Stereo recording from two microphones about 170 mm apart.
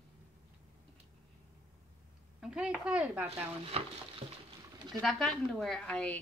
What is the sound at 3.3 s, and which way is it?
Stir, 35° right (ahead or behind).